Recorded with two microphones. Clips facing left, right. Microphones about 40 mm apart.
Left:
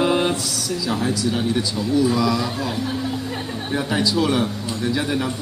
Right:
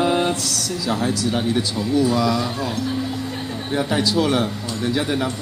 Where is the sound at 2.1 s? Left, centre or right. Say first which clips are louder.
Even; centre.